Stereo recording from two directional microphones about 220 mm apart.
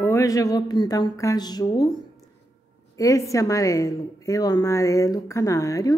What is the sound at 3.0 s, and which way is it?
A woman's voice, 15° left (ahead or behind).